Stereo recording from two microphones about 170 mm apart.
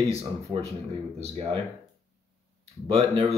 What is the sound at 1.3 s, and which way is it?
Speech, 35° right (ahead or behind).